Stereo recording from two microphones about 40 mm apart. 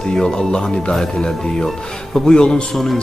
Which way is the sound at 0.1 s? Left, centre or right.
Centre.